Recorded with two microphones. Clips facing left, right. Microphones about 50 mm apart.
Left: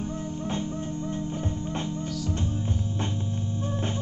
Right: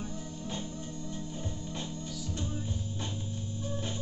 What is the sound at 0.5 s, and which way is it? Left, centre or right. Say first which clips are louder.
Music: left 8 dB; left.